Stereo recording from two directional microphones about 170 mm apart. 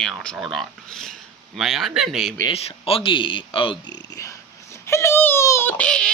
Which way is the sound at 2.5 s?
35° left (ahead or behind).